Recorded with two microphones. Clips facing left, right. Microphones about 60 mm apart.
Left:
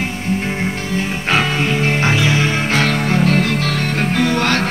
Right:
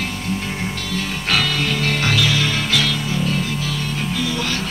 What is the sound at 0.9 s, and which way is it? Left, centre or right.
Music, left.